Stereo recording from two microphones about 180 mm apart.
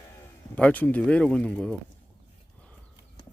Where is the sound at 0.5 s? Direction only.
10° left (ahead or behind).